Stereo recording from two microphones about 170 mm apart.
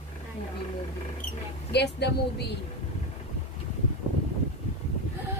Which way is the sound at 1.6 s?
75° left (ahead or behind).